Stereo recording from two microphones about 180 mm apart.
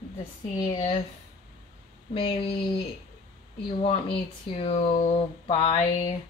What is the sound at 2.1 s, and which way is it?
Speech, 30° left (ahead or behind).